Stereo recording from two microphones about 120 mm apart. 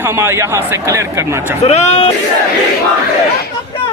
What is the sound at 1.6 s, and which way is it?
Speech, 65° left (ahead or behind).